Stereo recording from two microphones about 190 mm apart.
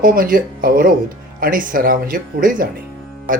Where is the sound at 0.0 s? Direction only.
50° right (ahead or behind).